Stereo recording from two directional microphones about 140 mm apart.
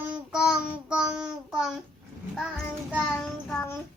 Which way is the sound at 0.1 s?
5° right (ahead or behind).